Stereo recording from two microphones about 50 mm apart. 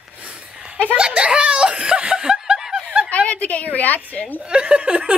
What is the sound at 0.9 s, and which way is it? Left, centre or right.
Giggle, centre.